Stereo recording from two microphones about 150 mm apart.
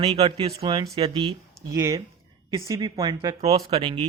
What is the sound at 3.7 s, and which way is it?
Speech, 35° right (ahead or behind).